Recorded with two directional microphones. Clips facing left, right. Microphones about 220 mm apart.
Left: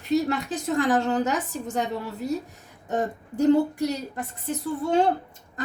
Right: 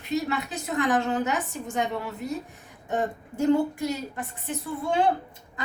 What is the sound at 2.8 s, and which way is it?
A woman's voice, 40° left (ahead or behind).